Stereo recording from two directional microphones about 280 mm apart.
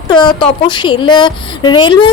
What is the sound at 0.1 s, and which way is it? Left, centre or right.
A woman's voice, centre.